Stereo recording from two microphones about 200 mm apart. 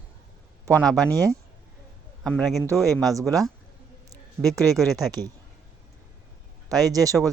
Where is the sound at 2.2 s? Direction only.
Centre (ahead or behind).